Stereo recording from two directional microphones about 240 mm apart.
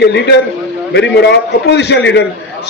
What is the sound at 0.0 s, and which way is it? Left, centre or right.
A woman's voice, left.